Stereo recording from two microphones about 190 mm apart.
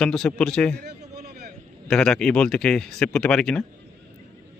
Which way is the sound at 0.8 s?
55° right (ahead or behind).